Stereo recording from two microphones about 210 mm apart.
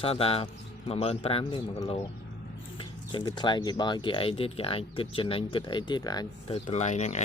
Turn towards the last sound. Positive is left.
turn(degrees=35)  # may be behind; listen again after turning